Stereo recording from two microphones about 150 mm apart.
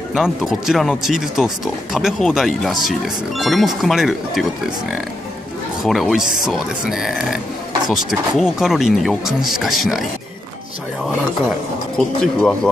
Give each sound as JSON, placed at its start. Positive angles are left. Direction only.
{"t": 0.1, "sound": "speech", "side_deg": 0}
{"t": 5.8, "sound": "speech", "side_deg": 0}
{"t": 12.2, "sound": "speech", "side_deg": 5}